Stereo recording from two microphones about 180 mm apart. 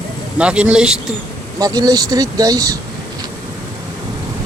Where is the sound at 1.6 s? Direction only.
20° right (ahead or behind).